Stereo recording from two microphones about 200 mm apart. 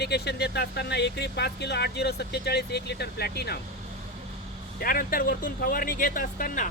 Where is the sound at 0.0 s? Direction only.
55° left (ahead or behind).